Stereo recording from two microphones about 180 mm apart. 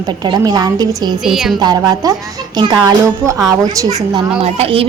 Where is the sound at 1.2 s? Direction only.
Centre (ahead or behind).